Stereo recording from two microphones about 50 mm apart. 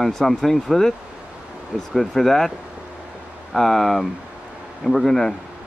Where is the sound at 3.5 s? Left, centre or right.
Centre.